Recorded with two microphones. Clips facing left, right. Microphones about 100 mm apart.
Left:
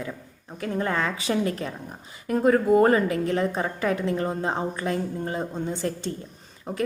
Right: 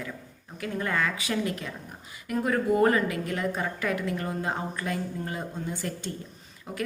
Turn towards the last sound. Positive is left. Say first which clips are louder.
# left 5 dB
turn(degrees=25)  # may be behind; listen again after turning